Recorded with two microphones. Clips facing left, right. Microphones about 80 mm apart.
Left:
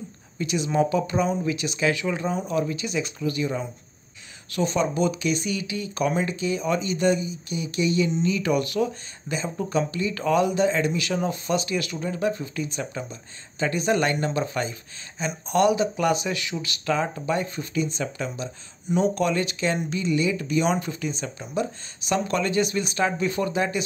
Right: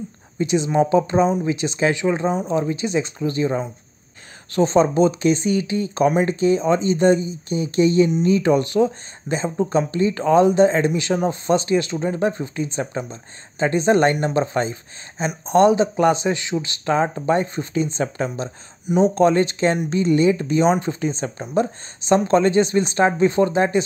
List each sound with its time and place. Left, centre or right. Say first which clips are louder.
0.4 s speech: right 5 dB; right
18.9 s speech: right 7 dB; right